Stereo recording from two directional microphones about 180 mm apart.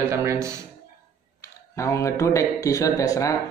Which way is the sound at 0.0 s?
15° right (ahead or behind).